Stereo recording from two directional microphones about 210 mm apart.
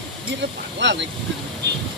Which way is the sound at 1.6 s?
55° right (ahead or behind).